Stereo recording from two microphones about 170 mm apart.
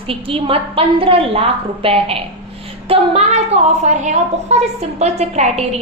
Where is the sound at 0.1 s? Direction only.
35° right (ahead or behind).